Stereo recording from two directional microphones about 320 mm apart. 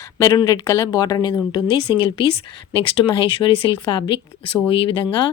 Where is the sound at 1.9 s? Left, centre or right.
Centre.